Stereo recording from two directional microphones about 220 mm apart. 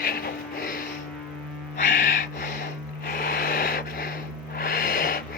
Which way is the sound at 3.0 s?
40° left (ahead or behind).